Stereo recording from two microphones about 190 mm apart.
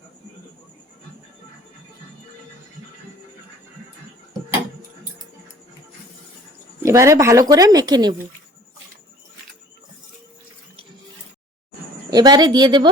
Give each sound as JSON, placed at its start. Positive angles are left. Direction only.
{"t": 6.8, "sound": "speech", "side_deg": -15}
{"t": 12.1, "sound": "speech", "side_deg": -20}